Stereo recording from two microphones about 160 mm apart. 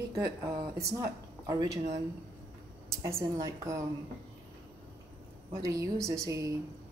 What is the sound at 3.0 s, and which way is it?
Speech, 20° right (ahead or behind).